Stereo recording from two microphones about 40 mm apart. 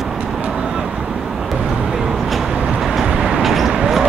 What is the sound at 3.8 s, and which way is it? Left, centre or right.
Basketball bounce, centre.